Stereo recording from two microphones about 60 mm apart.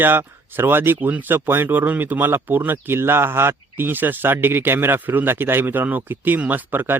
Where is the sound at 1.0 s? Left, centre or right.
Right.